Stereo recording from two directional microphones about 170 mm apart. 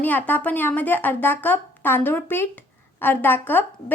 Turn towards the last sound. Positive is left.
turn(degrees=10)  # may be behind; listen again after turning